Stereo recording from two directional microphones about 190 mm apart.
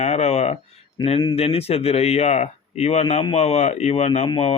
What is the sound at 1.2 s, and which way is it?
Speech, 25° left (ahead or behind).